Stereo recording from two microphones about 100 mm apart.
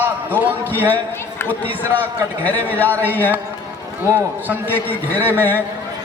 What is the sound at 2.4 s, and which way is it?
Speech, 15° left (ahead or behind).